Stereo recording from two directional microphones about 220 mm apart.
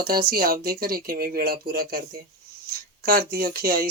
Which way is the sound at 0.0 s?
40° right (ahead or behind).